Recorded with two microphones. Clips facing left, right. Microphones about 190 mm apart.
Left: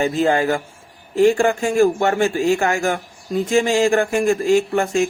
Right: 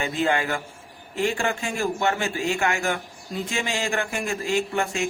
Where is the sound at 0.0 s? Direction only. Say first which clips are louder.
Left 7 dB; 40° left (ahead or behind).